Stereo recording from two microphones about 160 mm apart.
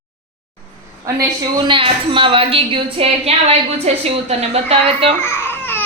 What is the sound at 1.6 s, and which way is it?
A woman's voice, 30° right (ahead or behind).